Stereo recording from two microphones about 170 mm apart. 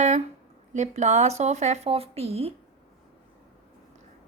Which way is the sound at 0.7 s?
45° right (ahead or behind).